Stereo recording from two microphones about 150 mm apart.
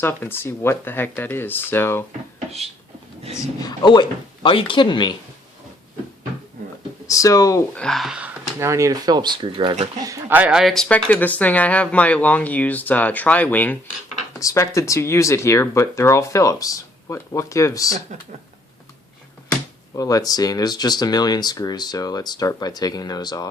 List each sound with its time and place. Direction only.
0.0 s speech: 15° left (ahead or behind)
3.3 s speech: 25° left (ahead or behind)
7.1 s speech: 20° left (ahead or behind)
7.8 s speech: centre (ahead or behind)
8.5 s speech: 20° right (ahead or behind)
10.3 s speech: 5° right (ahead or behind); by 17.9 s 20° left (ahead or behind)
20.0 s speech: 25° left (ahead or behind)